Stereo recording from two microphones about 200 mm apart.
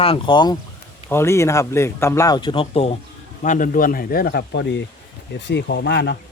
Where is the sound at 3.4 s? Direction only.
40° left (ahead or behind).